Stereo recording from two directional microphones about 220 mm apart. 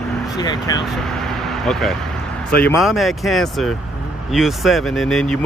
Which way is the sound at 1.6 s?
Centre (ahead or behind).